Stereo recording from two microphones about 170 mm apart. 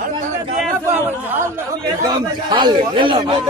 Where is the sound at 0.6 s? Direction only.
10° right (ahead or behind).